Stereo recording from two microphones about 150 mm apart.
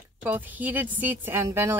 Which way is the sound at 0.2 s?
15° right (ahead or behind).